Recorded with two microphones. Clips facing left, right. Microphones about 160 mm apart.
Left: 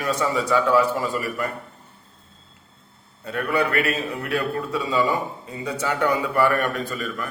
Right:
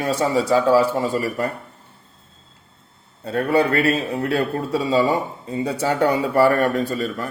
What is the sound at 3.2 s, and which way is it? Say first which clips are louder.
A man's voice: right 5 dB; 30° right (ahead or behind).